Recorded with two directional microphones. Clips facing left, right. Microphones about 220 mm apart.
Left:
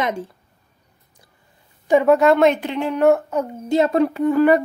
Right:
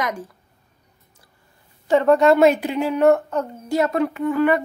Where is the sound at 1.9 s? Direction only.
10° left (ahead or behind).